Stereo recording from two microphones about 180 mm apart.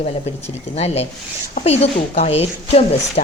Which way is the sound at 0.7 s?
35° left (ahead or behind).